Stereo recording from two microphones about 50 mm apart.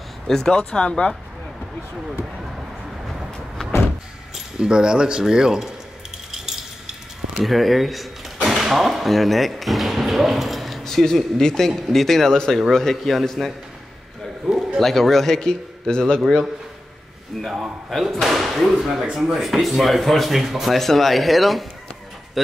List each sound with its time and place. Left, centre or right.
0.3 s a man's voice: centre
4.6 s speech: centre
6.3 s a sound: centre
8.5 s a man's voice: centre
14.5 s a sound: centre
14.8 s a man's voice: centre
18.0 s speech: centre